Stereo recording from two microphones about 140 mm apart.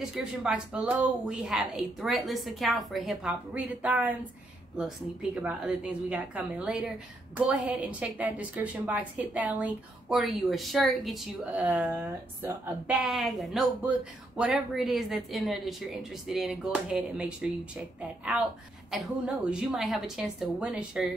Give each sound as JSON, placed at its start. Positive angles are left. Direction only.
{"t": 0.0, "sound": "a woman's voice", "side_deg": -5}
{"t": 8.0, "sound": "a woman's voice", "side_deg": -10}
{"t": 12.0, "sound": "speech", "side_deg": -20}
{"t": 12.8, "sound": "a woman's voice", "side_deg": 0}
{"t": 18.9, "sound": "a woman's voice", "side_deg": -5}